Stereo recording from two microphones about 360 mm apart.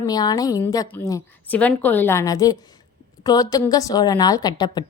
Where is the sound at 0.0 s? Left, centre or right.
Centre.